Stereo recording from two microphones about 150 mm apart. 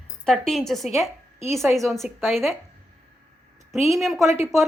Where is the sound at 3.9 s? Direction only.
Centre (ahead or behind).